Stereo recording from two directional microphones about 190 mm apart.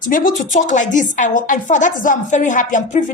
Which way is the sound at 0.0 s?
45° left (ahead or behind).